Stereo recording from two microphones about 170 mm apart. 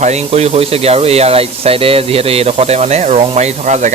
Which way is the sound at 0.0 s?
40° right (ahead or behind).